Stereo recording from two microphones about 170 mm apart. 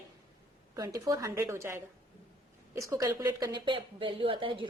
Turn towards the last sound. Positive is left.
turn(degrees=-30)  # may be behind; listen again after turning